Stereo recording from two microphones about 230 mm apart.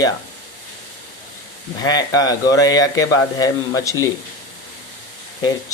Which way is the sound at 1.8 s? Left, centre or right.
Centre.